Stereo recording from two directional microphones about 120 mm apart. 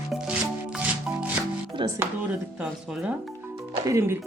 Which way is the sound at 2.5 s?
10° right (ahead or behind).